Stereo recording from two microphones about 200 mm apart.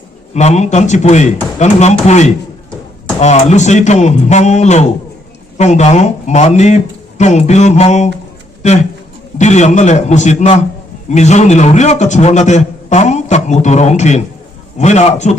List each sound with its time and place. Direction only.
0.3 s a man's voice: 35° left (ahead or behind)
9.4 s a man's voice: 35° left (ahead or behind)